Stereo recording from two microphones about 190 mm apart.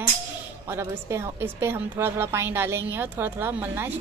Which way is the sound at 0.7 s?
15° right (ahead or behind).